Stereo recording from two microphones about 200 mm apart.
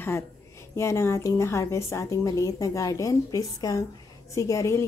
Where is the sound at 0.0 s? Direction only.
10° left (ahead or behind).